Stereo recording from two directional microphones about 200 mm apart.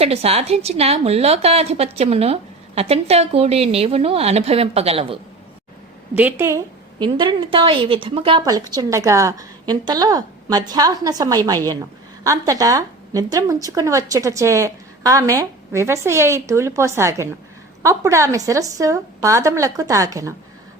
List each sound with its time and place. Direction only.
0.0 s a woman's voice: 30° right (ahead or behind)
7.0 s a woman's voice: 25° right (ahead or behind)